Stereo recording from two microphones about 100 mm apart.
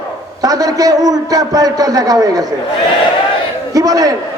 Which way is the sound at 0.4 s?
40° right (ahead or behind).